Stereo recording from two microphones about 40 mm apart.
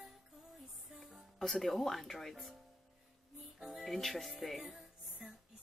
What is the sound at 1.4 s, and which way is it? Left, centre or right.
Speech, centre.